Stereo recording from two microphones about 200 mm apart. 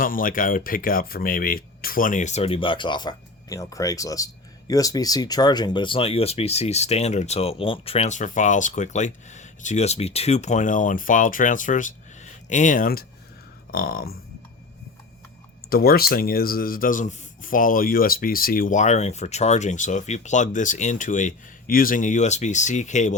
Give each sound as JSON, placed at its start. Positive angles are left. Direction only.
{"t": 0.0, "sound": "speech", "side_deg": 45}
{"t": 15.7, "sound": "speech", "side_deg": 50}